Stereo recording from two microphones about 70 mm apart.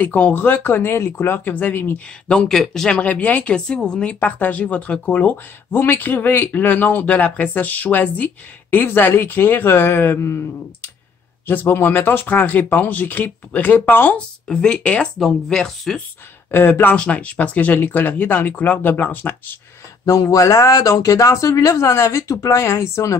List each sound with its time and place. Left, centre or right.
0.0 s speech: left
1.5 s speech: left
2.2 s speech: centre; by 10.4 s left
11.4 s speech: left
14.1 s speech: centre
15.1 s speech: centre
16.4 s speech: left
16.9 s speech: centre
20.1 s speech: left